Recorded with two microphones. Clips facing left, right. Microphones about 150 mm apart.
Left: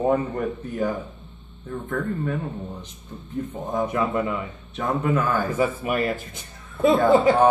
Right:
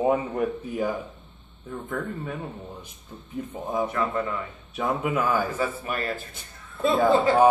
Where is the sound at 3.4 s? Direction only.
5° right (ahead or behind).